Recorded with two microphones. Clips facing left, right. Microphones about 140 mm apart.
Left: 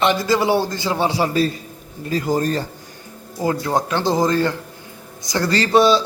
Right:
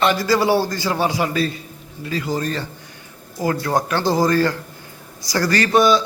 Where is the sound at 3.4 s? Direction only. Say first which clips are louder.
Even; 20° left (ahead or behind).